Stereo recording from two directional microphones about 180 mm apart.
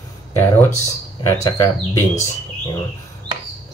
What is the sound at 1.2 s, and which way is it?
Speech, 15° left (ahead or behind).